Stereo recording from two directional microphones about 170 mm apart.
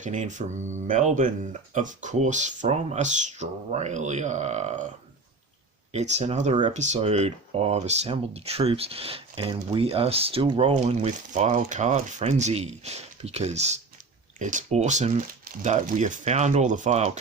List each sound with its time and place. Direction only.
0.0 s speech: 45° right (ahead or behind)
5.9 s speech: 40° right (ahead or behind)